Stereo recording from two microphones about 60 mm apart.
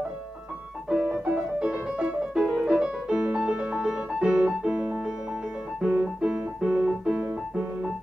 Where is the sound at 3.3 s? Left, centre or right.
Centre.